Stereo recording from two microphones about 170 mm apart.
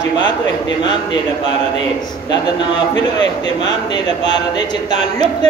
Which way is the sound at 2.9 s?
25° left (ahead or behind).